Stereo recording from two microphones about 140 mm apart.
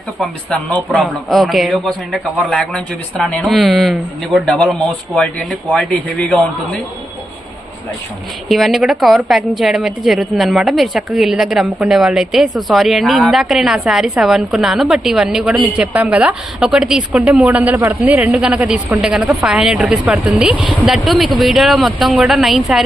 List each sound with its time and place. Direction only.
0.2 s a woman's voice: 10° left (ahead or behind)
8.4 s a woman's voice: centre (ahead or behind)